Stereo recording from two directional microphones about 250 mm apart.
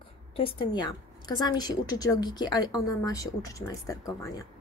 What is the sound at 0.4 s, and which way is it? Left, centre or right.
A woman's voice, centre.